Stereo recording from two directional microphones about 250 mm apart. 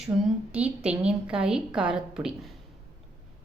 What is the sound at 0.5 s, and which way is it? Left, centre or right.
A woman's voice, centre.